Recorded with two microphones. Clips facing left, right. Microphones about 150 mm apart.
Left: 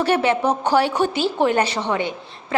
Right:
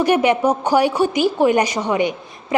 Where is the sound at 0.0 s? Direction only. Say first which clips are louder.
Right 3 dB; 15° right (ahead or behind).